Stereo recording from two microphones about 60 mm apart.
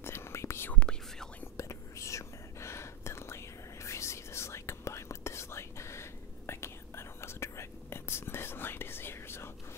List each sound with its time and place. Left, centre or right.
0.0 s whispering: left
0.7 s whispering: centre
1.6 s whispering: left